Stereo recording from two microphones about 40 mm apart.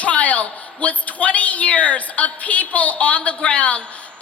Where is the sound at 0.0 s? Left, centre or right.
Left.